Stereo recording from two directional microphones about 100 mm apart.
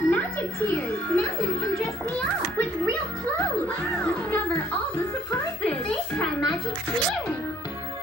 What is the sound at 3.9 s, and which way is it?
Music, 15° left (ahead or behind).